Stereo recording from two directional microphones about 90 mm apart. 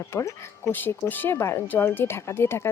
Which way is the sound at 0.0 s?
30° left (ahead or behind).